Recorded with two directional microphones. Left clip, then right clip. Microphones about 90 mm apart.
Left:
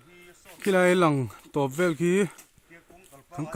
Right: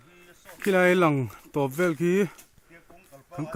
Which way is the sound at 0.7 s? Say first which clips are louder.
Even; 25° left (ahead or behind).